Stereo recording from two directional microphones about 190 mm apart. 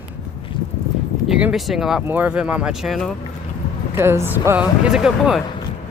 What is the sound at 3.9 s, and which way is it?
Speech, 15° right (ahead or behind).